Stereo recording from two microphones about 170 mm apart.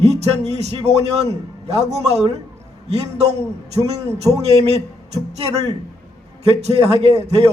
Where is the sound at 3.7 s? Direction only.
40° right (ahead or behind).